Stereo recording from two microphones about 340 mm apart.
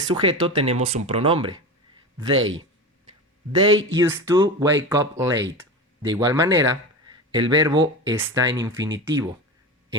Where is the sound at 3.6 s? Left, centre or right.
Right.